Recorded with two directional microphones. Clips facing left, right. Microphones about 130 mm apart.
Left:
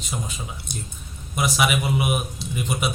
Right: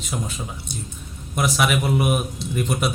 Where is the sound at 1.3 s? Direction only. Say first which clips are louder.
Right 1 dB; 5° left (ahead or behind).